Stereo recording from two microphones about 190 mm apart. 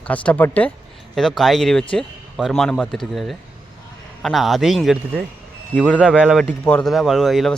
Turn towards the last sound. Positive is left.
turn(degrees=0)  # may be behind; listen again after turning